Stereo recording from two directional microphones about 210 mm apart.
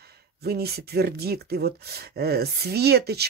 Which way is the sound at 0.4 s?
50° right (ahead or behind).